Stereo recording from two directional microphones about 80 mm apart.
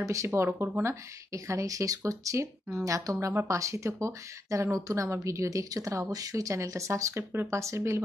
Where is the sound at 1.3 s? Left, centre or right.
Right.